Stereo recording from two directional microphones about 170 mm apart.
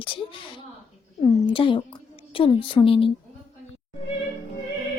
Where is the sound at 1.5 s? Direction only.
30° left (ahead or behind).